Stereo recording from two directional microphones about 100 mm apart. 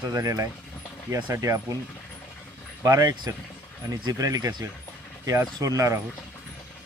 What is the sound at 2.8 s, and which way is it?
Speech, 35° right (ahead or behind).